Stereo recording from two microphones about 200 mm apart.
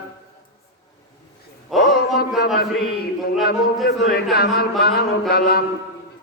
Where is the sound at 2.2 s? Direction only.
55° left (ahead or behind).